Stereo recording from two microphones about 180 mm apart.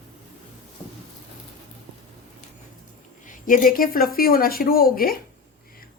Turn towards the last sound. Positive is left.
turn(degrees=55)  # may be behind; listen again after turning